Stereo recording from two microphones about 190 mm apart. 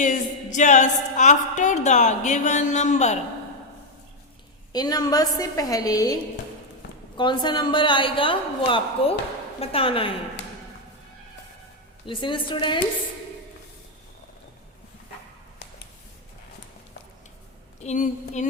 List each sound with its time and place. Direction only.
0.0 s a woman's voice: 40° left (ahead or behind)
4.7 s a woman's voice: 20° left (ahead or behind)
7.2 s a woman's voice: 25° left (ahead or behind)
12.0 s a woman's voice: 25° left (ahead or behind)
17.7 s a woman's voice: 40° left (ahead or behind)